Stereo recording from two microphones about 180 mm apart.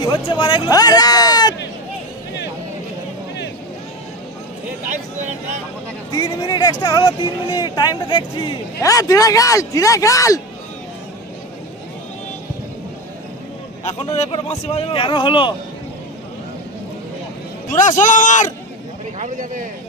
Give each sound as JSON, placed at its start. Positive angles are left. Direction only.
{"t": 0.0, "sound": "speech", "side_deg": 25}
{"t": 4.8, "sound": "speech", "side_deg": -45}
{"t": 6.1, "sound": "speech", "side_deg": 25}
{"t": 13.8, "sound": "speech", "side_deg": 40}
{"t": 17.6, "sound": "a man's voice", "side_deg": 45}
{"t": 19.1, "sound": "speech", "side_deg": -45}